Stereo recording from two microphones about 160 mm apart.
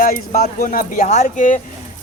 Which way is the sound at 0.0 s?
60° left (ahead or behind).